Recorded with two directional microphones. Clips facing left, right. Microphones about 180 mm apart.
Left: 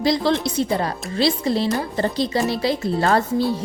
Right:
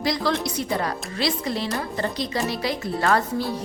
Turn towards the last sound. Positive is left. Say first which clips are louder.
# left 6 dB
turn(degrees=0)  # may be behind; listen again after turning